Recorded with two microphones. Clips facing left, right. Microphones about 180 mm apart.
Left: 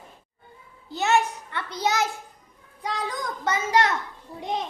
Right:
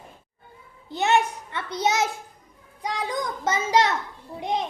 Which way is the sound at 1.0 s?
20° right (ahead or behind).